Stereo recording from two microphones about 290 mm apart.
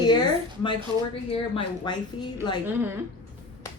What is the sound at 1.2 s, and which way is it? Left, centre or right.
A woman's voice, centre.